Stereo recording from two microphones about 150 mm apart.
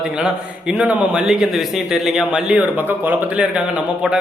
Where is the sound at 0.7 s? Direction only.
5° right (ahead or behind).